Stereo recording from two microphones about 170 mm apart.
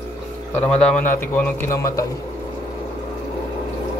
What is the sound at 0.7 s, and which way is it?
Speech, 5° left (ahead or behind).